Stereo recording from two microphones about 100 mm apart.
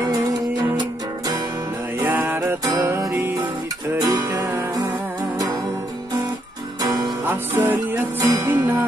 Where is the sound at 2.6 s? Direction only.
35° right (ahead or behind).